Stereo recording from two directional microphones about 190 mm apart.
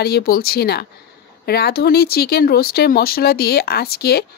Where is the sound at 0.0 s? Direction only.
55° left (ahead or behind).